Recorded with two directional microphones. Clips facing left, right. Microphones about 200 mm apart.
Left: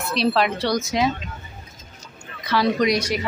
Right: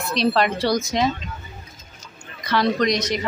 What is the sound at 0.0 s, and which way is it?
Speech, 5° left (ahead or behind).